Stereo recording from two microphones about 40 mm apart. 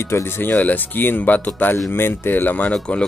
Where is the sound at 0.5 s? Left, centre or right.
Left.